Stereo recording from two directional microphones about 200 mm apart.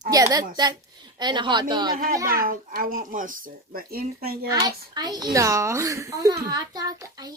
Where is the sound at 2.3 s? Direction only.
45° right (ahead or behind).